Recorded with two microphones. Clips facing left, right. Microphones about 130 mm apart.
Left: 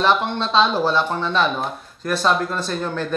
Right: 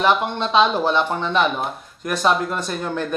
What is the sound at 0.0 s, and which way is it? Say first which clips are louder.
A woman's voice: even; 15° right (ahead or behind).